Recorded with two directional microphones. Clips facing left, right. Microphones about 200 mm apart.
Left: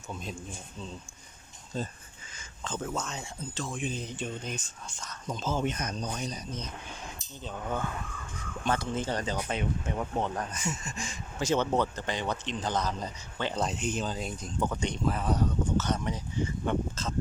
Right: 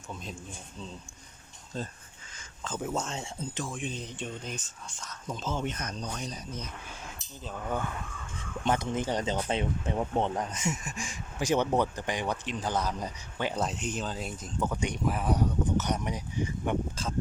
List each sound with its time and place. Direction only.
0.1 s speech: centre (ahead or behind)
1.7 s speech: 5° left (ahead or behind)
2.6 s speech: 10° right (ahead or behind)
2.9 s speech: 25° right (ahead or behind)
3.6 s speech: centre (ahead or behind)
6.2 s speech: 5° right (ahead or behind)
8.4 s speech: 20° right (ahead or behind)